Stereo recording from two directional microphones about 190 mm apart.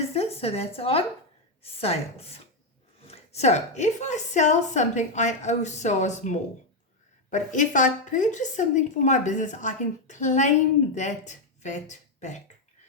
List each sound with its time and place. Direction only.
0.1 s a woman's voice: 30° left (ahead or behind)